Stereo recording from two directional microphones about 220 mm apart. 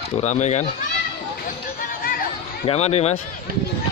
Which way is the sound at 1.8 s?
40° left (ahead or behind).